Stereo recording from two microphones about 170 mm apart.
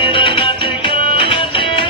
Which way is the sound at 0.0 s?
30° left (ahead or behind).